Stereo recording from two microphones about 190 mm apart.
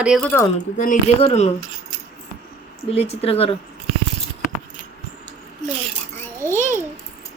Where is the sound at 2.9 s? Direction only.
30° left (ahead or behind).